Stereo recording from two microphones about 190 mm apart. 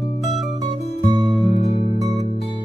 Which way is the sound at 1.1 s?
25° right (ahead or behind).